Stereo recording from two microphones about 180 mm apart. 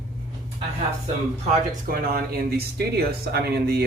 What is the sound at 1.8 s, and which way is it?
Speech, 55° right (ahead or behind).